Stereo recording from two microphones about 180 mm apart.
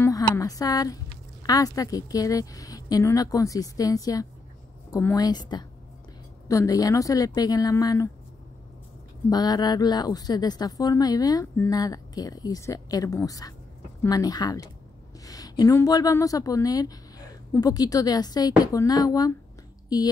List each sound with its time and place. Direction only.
0.0 s a woman's voice: 20° left (ahead or behind)
9.3 s a woman's voice: 20° left (ahead or behind)